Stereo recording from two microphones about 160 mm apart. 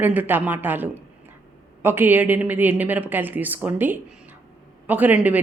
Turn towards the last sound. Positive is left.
turn(degrees=-10)  # may be behind; listen again after turning